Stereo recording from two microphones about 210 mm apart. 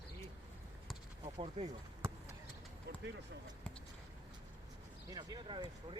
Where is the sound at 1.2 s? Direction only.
25° right (ahead or behind).